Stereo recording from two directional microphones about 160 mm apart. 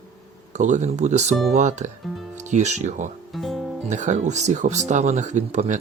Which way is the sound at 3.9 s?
50° right (ahead or behind).